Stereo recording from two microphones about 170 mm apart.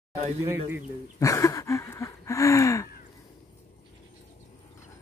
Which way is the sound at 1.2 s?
20° left (ahead or behind).